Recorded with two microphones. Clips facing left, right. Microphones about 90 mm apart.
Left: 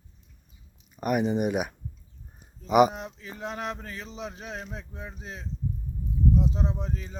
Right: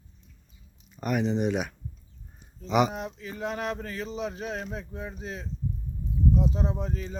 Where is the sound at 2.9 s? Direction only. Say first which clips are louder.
Right 3 dB; 25° left (ahead or behind).